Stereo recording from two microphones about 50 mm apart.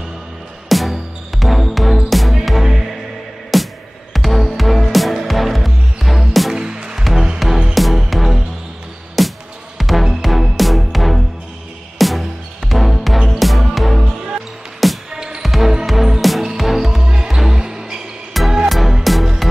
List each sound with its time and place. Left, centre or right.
0.7 s music: centre
6.5 s music: centre
15.0 s music: centre
15.4 s music: centre
17.0 s music: centre
18.3 s music: centre